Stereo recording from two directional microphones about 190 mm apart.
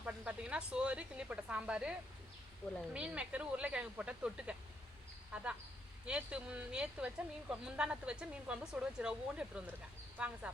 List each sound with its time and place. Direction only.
0.0 s a woman's voice: 5° right (ahead or behind)